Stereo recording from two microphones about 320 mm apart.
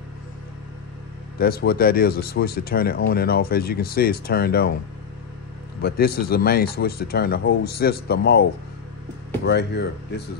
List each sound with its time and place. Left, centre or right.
1.4 s speech: left
5.8 s speech: left